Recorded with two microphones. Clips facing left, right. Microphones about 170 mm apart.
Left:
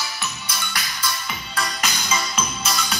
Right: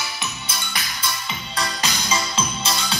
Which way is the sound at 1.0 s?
25° right (ahead or behind).